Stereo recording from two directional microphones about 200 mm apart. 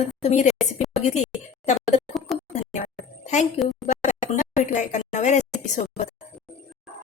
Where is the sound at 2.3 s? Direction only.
Centre (ahead or behind).